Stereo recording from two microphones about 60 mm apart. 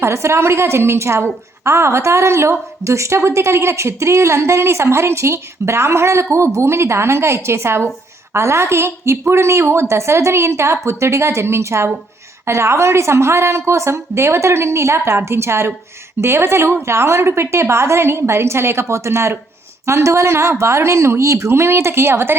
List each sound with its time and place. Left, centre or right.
0.0 s a woman's voice: right